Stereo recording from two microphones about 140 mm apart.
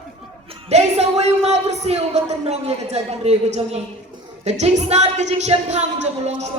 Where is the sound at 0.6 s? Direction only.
50° right (ahead or behind).